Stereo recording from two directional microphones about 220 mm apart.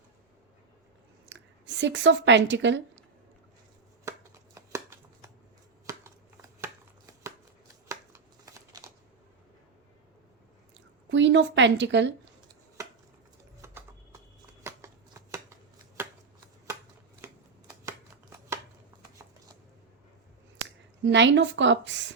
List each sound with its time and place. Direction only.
1.3 s speech: 55° right (ahead or behind)
4.5 s shuffling cards: 15° right (ahead or behind)
7.9 s shuffling cards: 15° right (ahead or behind)
11.1 s a woman's voice: 55° right (ahead or behind)
12.5 s chopping: 15° right (ahead or behind)
13.6 s clip-clop: 10° right (ahead or behind)
14.6 s shuffling cards: 15° right (ahead or behind)
17.7 s shuffling cards: 15° right (ahead or behind)
21.0 s a woman's voice: 55° right (ahead or behind)